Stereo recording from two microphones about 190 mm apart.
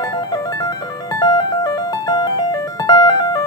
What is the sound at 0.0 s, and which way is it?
Music, 20° left (ahead or behind).